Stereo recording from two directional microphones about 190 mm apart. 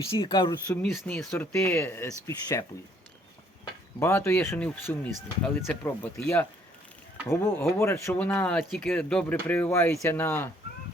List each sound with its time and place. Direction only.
0.1 s speech: 25° left (ahead or behind)
0.8 s speech: centre (ahead or behind)
4.0 s speech: 15° left (ahead or behind)